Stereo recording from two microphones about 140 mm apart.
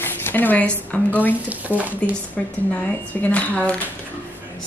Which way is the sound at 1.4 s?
10° right (ahead or behind).